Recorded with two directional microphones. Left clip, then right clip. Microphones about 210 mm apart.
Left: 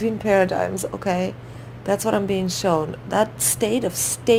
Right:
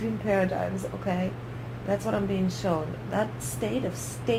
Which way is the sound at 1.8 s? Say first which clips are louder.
Left 7 dB; 50° left (ahead or behind).